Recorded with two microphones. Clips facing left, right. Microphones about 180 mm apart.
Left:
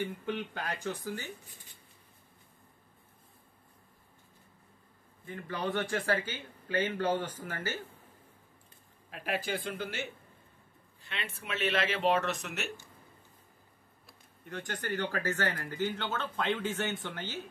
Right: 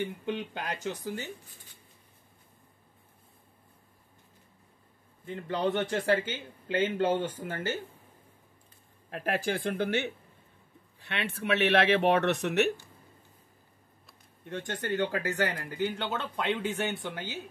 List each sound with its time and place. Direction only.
0.2 s a man's voice: 20° right (ahead or behind)
5.2 s a man's voice: 25° right (ahead or behind)
9.1 s speech: 50° right (ahead or behind)
14.4 s a man's voice: 25° right (ahead or behind)